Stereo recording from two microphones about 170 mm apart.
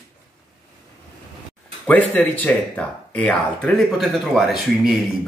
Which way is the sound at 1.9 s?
10° left (ahead or behind).